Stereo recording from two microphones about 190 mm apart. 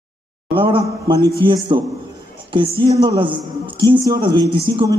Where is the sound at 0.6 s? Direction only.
25° right (ahead or behind).